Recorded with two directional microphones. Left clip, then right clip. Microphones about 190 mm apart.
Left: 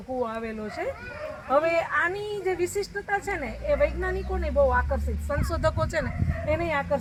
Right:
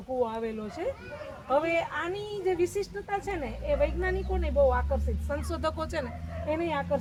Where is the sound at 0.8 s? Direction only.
45° right (ahead or behind).